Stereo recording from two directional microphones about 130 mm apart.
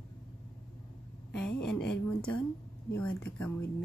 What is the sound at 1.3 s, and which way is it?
A woman's voice, 10° left (ahead or behind).